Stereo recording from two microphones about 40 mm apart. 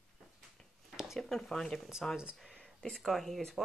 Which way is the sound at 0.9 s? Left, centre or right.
Centre.